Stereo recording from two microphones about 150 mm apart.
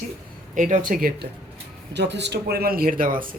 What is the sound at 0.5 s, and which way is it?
Speech, 55° right (ahead or behind).